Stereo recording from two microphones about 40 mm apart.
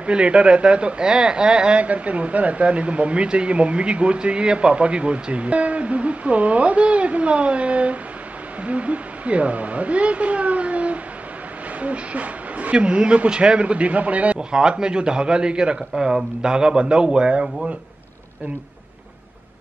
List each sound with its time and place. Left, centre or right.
0.0 s a man's voice: right
1.8 s a woman's voice: right
12.7 s speech: right
14.5 s a man's voice: centre